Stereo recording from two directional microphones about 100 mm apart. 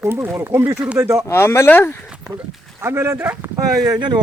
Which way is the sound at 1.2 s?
25° left (ahead or behind).